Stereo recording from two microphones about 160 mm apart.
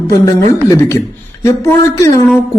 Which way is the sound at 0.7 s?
20° left (ahead or behind).